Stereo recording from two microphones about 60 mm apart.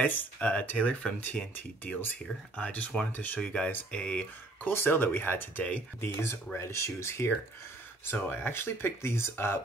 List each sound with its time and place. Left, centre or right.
0.0 s speech: left
4.6 s speech: left
5.6 s speech: left
5.9 s speech: left
6.7 s speech: left
8.0 s speech: left